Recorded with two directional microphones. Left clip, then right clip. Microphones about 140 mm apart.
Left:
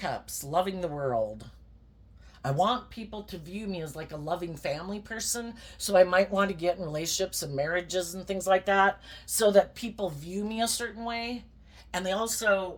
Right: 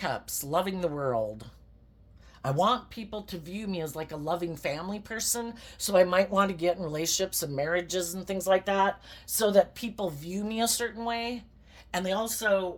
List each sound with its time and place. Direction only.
0.0 s speech: 50° right (ahead or behind)